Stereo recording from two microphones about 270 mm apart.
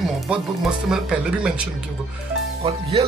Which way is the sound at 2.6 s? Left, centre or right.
Right.